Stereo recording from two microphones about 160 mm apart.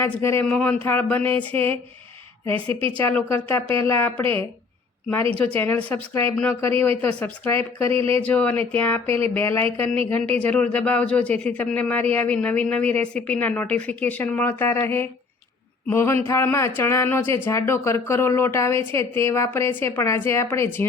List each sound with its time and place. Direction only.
0.0 s speech: 15° left (ahead or behind)
3.0 s speech: 10° left (ahead or behind)
5.5 s speech: 10° left (ahead or behind)
7.9 s speech: 35° right (ahead or behind)
8.3 s speech: 10° left (ahead or behind)
9.0 s speech: 35° right (ahead or behind)
9.3 s speech: 15° left (ahead or behind)